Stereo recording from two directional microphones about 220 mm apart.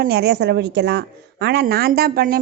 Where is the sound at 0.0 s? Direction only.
45° right (ahead or behind).